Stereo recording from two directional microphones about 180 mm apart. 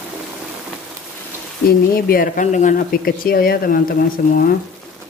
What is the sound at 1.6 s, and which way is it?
Speech, 55° left (ahead or behind).